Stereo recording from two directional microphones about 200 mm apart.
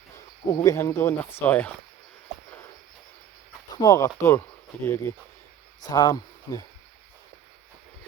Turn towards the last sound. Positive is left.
turn(degrees=15)  # may be behind; listen again after turning